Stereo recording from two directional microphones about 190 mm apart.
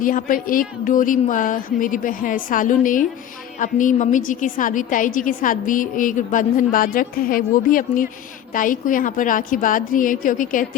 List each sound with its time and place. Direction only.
0.0 s a woman's voice: 45° left (ahead or behind)